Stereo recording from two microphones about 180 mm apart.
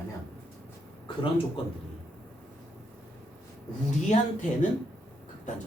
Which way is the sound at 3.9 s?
40° left (ahead or behind).